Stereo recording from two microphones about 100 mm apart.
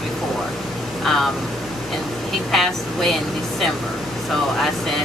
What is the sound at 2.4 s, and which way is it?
Speech, 5° left (ahead or behind).